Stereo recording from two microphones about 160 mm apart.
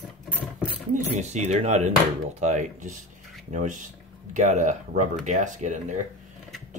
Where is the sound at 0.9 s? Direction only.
45° right (ahead or behind).